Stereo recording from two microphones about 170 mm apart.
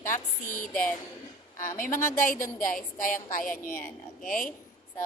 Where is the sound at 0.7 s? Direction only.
5° left (ahead or behind).